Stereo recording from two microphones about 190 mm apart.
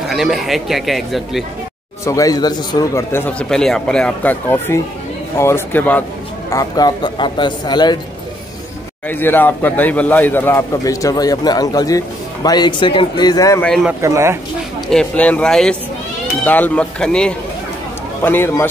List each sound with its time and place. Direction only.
0.1 s speech: centre (ahead or behind)
2.0 s speech: 20° left (ahead or behind)
6.5 s a man's voice: 20° left (ahead or behind)
9.1 s a man's voice: 10° left (ahead or behind)
13.7 s speech: centre (ahead or behind)
14.0 s speech: 15° right (ahead or behind)
14.9 s speech: 5° left (ahead or behind)